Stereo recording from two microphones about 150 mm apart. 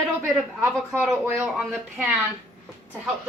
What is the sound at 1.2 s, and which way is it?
Speech, 15° right (ahead or behind).